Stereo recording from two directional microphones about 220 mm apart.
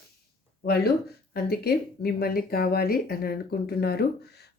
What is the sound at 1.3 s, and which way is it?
Speech, 45° left (ahead or behind).